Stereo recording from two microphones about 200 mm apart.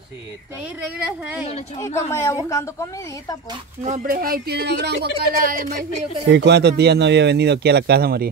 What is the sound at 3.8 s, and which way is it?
Speech, 40° right (ahead or behind).